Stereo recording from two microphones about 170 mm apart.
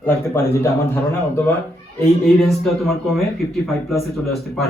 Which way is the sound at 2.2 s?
Centre (ahead or behind).